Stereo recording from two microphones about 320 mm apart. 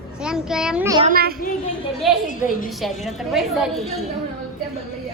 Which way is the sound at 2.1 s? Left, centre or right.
Centre.